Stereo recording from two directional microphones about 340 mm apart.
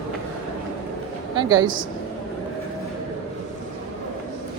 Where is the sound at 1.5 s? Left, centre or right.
Right.